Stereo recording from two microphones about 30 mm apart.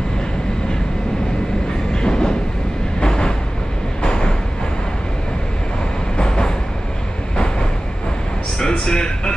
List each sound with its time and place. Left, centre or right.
2.0 s train: left
4.0 s vehicle: left
6.1 s train: left
8.5 s a sound: left